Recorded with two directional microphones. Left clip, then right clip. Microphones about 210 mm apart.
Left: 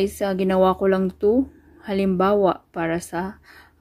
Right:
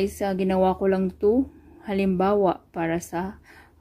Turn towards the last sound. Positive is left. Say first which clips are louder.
# left 2 dB
turn(degrees=5)  # may be behind; listen again after turning